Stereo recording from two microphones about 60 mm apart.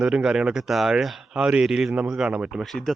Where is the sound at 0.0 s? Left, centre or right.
Centre.